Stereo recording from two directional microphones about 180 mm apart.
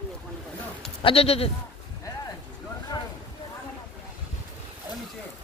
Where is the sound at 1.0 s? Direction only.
35° left (ahead or behind).